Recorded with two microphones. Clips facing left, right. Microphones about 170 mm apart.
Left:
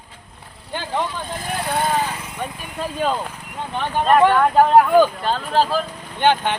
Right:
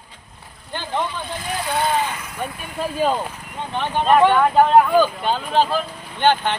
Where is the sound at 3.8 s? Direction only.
Centre (ahead or behind).